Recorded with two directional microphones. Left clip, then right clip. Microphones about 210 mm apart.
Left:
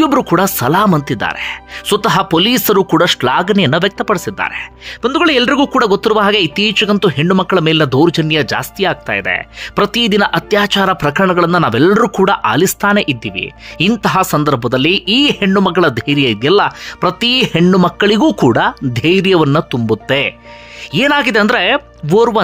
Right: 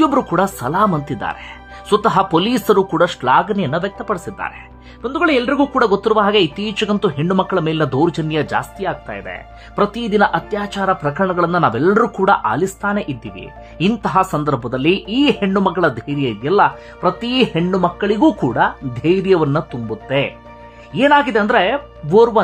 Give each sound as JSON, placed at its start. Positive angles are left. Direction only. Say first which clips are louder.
{"t": 0.0, "sound": "speech", "louder": "left 3 dB", "side_deg": 20}
{"t": 11.2, "sound": "speech", "louder": "left 2 dB", "side_deg": 15}